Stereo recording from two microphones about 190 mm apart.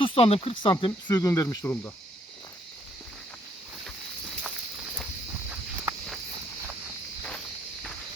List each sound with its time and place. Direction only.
0.0 s speech: 30° left (ahead or behind); by 1.9 s 10° left (ahead or behind)
5.5 s walk: 5° right (ahead or behind)